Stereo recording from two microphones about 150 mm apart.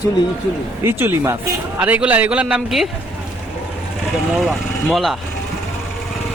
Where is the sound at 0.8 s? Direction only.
15° right (ahead or behind).